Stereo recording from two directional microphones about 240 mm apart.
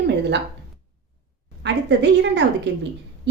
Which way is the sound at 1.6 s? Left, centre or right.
Right.